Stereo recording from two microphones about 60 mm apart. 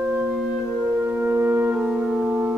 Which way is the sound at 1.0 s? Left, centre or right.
Right.